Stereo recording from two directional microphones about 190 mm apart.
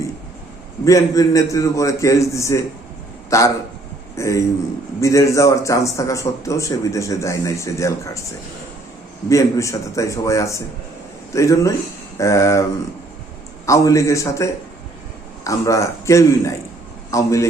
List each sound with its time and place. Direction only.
0.9 s a man's voice: 15° left (ahead or behind)
9.3 s a man's voice: 15° left (ahead or behind)
13.7 s a man's voice: 15° left (ahead or behind)